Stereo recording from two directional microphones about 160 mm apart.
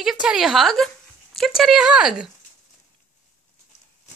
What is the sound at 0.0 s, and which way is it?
Speech, 5° right (ahead or behind).